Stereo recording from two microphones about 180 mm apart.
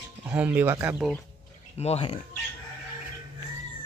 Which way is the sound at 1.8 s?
35° left (ahead or behind).